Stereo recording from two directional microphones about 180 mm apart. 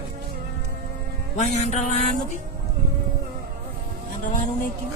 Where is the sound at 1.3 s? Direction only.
40° left (ahead or behind).